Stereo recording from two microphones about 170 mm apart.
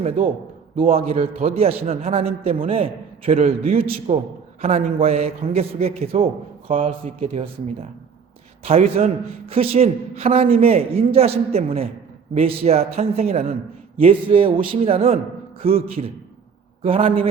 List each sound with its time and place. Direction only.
0.0 s a man's voice: 35° right (ahead or behind)